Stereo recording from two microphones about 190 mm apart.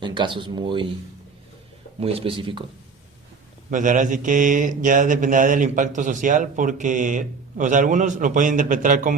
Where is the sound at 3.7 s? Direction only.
40° right (ahead or behind).